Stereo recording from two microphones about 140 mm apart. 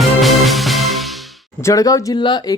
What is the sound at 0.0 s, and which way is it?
Music, centre (ahead or behind).